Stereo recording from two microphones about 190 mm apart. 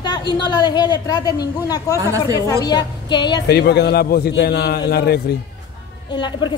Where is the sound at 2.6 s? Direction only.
20° left (ahead or behind).